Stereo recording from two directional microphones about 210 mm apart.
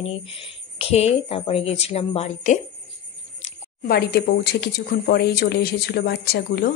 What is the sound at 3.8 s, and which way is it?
Speech, 50° left (ahead or behind).